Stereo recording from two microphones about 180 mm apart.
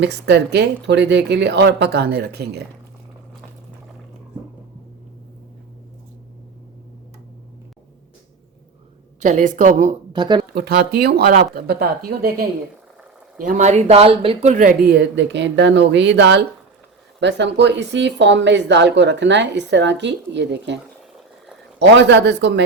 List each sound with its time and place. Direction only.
0.0 s speech: 70° right (ahead or behind)
9.2 s a woman's voice: 45° right (ahead or behind)
10.1 s speech: 25° right (ahead or behind)
10.5 s speech: 60° right (ahead or behind)
13.4 s speech: 45° right (ahead or behind)
14.5 s a woman's voice: 45° right (ahead or behind)
14.9 s speech: 80° right
21.8 s speech: 80° right